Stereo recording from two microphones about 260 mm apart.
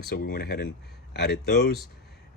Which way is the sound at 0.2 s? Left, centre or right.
Left.